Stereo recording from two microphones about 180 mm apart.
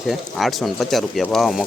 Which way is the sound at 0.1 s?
Centre (ahead or behind).